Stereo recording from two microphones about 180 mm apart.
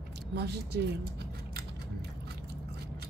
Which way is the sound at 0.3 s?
65° right (ahead or behind).